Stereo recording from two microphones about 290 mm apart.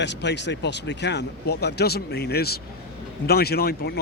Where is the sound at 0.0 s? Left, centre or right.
Left.